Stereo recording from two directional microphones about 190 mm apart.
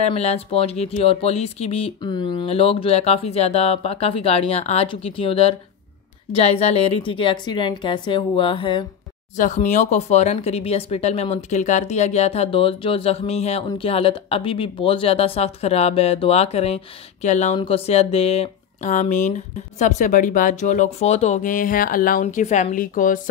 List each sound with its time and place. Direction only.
0.0 s a woman's voice: 35° left (ahead or behind)
9.4 s speech: 40° left (ahead or behind)